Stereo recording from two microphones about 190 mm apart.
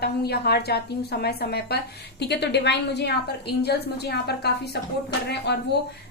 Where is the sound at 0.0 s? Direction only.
55° left (ahead or behind).